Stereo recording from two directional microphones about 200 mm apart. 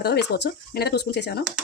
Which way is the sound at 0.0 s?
55° left (ahead or behind).